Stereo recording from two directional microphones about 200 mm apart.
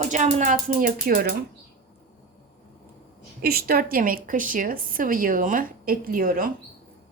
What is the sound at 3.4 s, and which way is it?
Speech, 50° right (ahead or behind).